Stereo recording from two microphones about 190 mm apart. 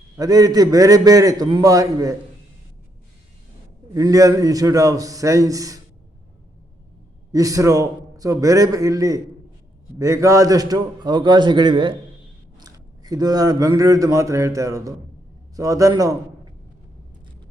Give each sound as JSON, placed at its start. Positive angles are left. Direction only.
{"t": 0.2, "sound": "a man's voice", "side_deg": -20}
{"t": 3.9, "sound": "a man's voice", "side_deg": -20}
{"t": 7.3, "sound": "a man's voice", "side_deg": -20}